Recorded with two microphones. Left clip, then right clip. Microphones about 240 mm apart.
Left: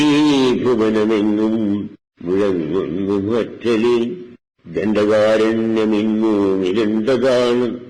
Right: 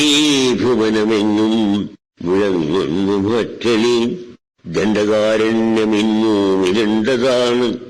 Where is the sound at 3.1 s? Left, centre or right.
Right.